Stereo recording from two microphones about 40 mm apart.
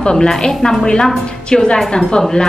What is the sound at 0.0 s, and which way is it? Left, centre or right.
A woman's voice, centre.